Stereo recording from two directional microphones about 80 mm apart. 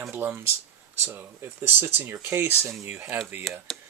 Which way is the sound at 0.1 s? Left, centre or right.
Right.